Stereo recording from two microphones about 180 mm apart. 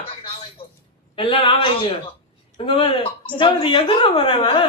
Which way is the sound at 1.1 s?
30° left (ahead or behind).